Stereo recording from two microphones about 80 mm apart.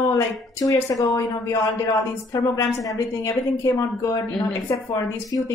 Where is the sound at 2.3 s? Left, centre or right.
Left.